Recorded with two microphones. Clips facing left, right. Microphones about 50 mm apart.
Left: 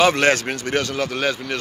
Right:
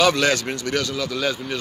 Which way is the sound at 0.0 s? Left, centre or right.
Left.